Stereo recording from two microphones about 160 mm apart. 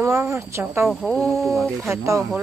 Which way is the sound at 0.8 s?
Centre (ahead or behind).